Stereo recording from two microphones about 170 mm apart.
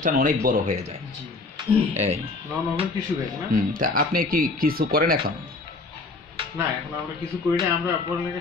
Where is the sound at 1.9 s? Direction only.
40° right (ahead or behind).